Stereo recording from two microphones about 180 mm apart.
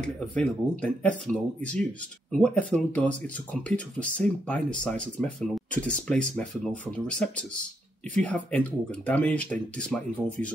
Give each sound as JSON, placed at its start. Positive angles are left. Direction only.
{"t": 0.3, "sound": "speech", "side_deg": 5}